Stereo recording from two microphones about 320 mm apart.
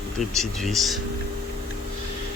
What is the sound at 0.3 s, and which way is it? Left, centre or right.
Speech, centre.